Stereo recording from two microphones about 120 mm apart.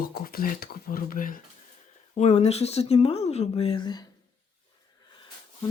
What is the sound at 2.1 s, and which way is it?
Speech, 70° left (ahead or behind).